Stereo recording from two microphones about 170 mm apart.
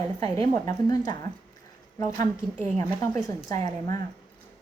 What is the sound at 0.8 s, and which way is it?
Speech, 25° left (ahead or behind).